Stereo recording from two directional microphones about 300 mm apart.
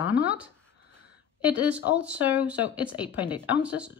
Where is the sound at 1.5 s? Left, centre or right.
Centre.